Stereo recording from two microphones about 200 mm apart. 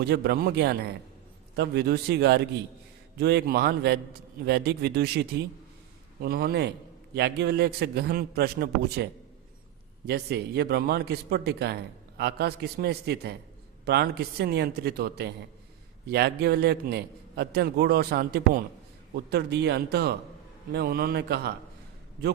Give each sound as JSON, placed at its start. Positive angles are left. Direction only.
{"t": 0.0, "sound": "a man's voice", "side_deg": -55}
{"t": 6.2, "sound": "a man's voice", "side_deg": -50}
{"t": 10.1, "sound": "a man's voice", "side_deg": -55}